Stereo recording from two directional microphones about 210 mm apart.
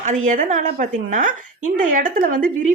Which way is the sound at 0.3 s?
35° right (ahead or behind).